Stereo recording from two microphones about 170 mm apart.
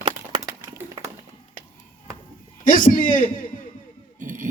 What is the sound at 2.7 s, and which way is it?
Speech, 50° left (ahead or behind).